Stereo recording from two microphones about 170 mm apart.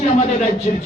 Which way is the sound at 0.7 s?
40° left (ahead or behind).